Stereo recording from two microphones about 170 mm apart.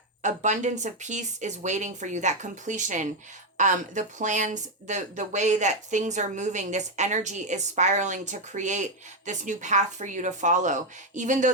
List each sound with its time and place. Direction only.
0.2 s speech: 45° right (ahead or behind)